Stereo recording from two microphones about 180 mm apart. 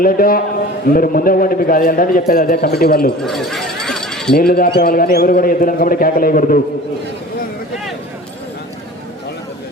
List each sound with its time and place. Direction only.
0.0 s a man's voice: 55° left (ahead or behind)
3.2 s a sound: centre (ahead or behind)
4.4 s a man's voice: 55° left (ahead or behind)